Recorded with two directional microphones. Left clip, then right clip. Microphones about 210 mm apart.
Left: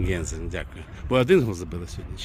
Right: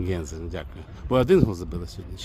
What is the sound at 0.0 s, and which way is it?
Speech, 10° right (ahead or behind).